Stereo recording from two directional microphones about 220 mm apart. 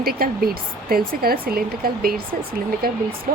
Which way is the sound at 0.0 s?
45° right (ahead or behind).